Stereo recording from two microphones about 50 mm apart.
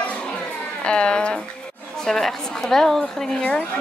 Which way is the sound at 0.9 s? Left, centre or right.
Centre.